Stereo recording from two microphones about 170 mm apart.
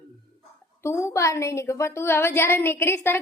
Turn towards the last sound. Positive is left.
turn(degrees=15)  # may be behind; listen again after turning